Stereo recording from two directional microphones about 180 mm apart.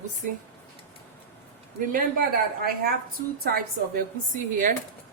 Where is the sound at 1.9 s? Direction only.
55° right (ahead or behind).